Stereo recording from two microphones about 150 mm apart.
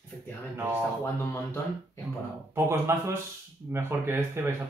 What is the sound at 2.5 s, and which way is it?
Speech, 20° right (ahead or behind).